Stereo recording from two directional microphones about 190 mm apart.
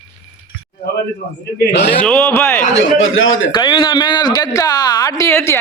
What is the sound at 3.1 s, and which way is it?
Speech, 90° left.